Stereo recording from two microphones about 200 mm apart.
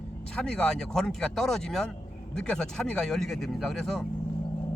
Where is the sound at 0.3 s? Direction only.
5° left (ahead or behind).